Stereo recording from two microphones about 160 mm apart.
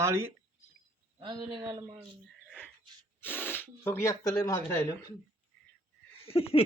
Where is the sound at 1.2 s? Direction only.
30° right (ahead or behind).